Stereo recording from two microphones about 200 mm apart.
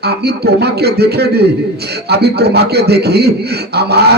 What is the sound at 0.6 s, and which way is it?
A man's voice, 55° right (ahead or behind).